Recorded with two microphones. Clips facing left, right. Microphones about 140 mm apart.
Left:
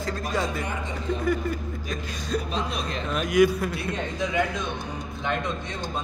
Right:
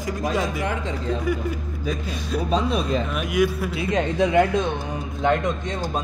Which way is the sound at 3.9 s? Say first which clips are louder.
Right 8 dB; 65° right (ahead or behind).